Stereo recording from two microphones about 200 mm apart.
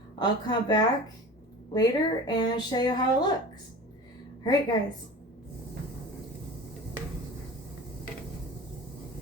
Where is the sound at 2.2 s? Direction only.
20° left (ahead or behind).